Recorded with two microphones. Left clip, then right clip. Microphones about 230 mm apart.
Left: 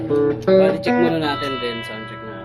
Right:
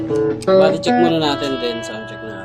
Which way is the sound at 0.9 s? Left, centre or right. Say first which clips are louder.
Right 3 dB; centre.